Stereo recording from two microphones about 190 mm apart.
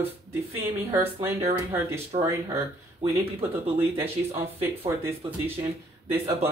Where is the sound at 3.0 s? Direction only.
30° right (ahead or behind).